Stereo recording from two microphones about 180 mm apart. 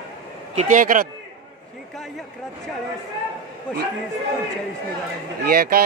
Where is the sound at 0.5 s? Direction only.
45° right (ahead or behind).